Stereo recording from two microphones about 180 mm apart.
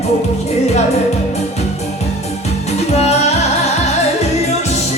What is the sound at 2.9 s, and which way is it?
Music, 35° left (ahead or behind).